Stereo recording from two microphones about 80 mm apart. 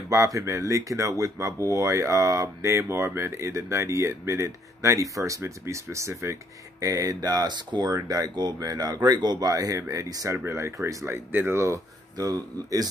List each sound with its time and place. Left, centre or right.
0.1 s speech: right
10.3 s speech: right
11.1 s speech: right
12.2 s speech: right